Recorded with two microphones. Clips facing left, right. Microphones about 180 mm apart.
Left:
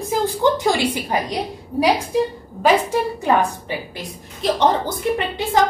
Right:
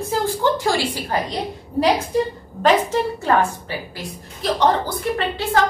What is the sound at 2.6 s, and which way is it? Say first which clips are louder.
A woman's voice: even; 15° left (ahead or behind).